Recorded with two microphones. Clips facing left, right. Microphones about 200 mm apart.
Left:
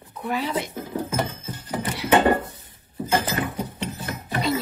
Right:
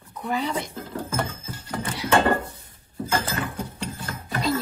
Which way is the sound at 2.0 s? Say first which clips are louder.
Left 2 dB; 10° left (ahead or behind).